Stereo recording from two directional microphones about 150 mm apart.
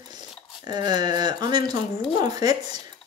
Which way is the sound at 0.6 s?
30° right (ahead or behind).